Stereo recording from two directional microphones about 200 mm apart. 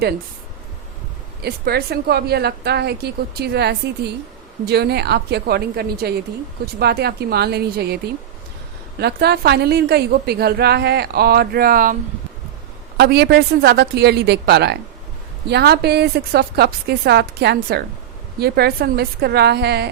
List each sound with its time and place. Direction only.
1.4 s a woman's voice: 50° right (ahead or behind)
9.0 s a woman's voice: 55° right (ahead or behind)
13.0 s a woman's voice: 55° right (ahead or behind)